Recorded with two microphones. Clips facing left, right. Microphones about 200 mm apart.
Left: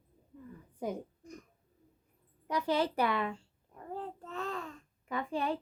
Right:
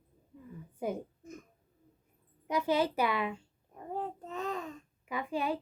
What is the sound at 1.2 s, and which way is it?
Speech, 25° right (ahead or behind).